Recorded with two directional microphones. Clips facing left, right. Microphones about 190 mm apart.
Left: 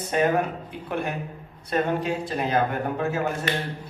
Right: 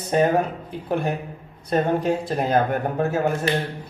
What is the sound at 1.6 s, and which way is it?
Speech, 40° right (ahead or behind).